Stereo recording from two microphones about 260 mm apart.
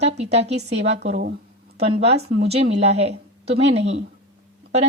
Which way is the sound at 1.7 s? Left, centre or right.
Right.